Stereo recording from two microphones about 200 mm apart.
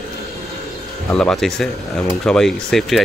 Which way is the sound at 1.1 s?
Centre (ahead or behind).